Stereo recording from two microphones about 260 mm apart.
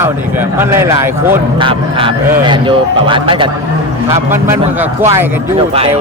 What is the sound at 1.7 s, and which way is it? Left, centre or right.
Speech, centre.